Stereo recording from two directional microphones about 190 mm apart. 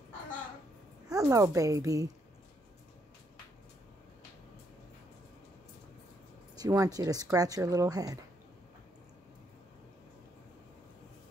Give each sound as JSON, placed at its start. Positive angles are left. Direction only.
{"t": 1.0, "sound": "speech", "side_deg": -20}
{"t": 6.5, "sound": "speech", "side_deg": -20}